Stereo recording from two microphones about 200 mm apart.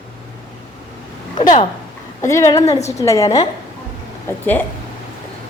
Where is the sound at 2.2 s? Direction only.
15° left (ahead or behind).